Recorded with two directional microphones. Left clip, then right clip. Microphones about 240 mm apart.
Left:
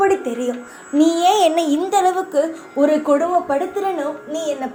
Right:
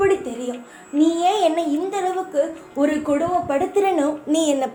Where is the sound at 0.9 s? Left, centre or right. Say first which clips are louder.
Left 4 dB; left.